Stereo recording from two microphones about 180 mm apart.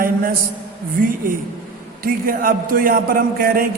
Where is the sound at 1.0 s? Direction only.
50° right (ahead or behind).